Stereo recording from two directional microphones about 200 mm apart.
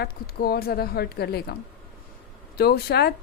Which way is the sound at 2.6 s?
50° left (ahead or behind).